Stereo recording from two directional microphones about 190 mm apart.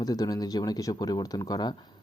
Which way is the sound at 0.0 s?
20° left (ahead or behind).